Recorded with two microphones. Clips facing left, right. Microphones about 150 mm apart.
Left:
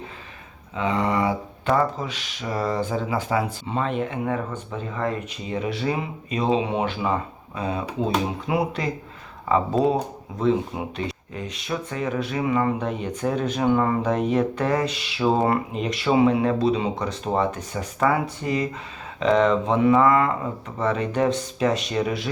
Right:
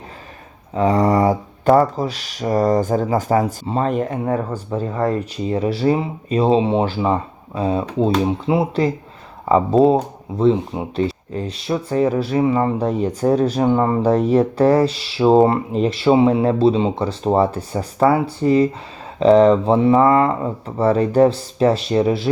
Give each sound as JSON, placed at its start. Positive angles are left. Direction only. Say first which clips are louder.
{"t": 0.7, "sound": "speech", "louder": "right 8 dB", "side_deg": -40}